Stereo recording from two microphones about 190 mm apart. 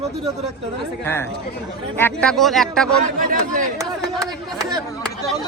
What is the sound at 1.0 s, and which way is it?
Speech, 10° left (ahead or behind).